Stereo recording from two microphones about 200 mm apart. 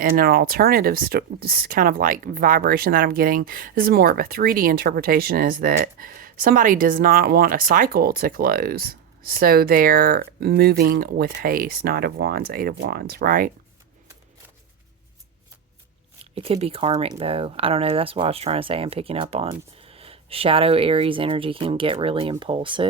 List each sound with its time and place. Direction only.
0.0 s speech: 50° right (ahead or behind)
16.3 s speech: 30° right (ahead or behind)